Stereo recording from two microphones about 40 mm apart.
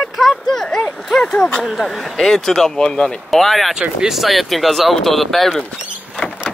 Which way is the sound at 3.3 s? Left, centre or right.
Centre.